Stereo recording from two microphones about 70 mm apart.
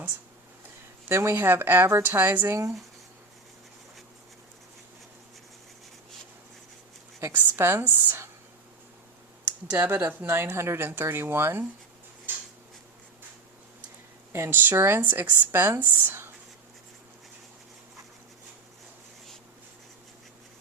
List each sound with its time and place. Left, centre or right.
1.0 s a woman's voice: right
7.3 s a woman's voice: right
9.7 s a woman's voice: right
12.3 s a sound: right
14.3 s speech: right